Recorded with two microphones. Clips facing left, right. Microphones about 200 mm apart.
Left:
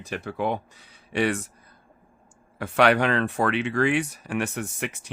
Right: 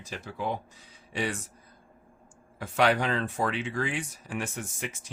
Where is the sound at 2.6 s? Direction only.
65° left (ahead or behind).